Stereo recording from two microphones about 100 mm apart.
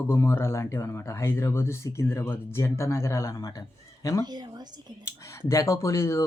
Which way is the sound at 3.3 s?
45° left (ahead or behind).